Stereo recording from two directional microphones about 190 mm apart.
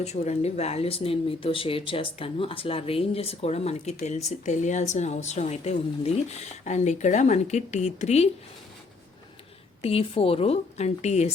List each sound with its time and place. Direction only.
0.0 s speech: 35° left (ahead or behind)
9.8 s speech: 30° left (ahead or behind)